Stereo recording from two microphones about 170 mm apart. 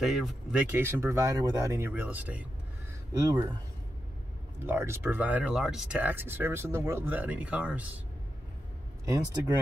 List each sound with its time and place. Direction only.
0.0 s speech: centre (ahead or behind)
3.2 s speech: 25° right (ahead or behind)
4.6 s speech: 15° right (ahead or behind)
9.0 s speech: 20° right (ahead or behind)